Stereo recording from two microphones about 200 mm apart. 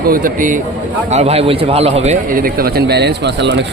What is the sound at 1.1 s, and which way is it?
A man's voice, 30° right (ahead or behind).